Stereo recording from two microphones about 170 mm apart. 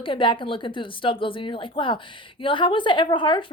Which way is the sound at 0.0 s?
30° left (ahead or behind).